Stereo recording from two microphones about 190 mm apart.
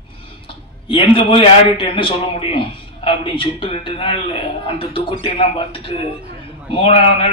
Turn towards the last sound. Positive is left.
turn(degrees=25)  # may be behind; listen again after turning